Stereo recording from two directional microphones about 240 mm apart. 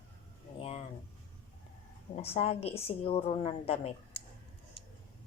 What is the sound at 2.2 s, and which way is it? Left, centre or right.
A woman's voice, left.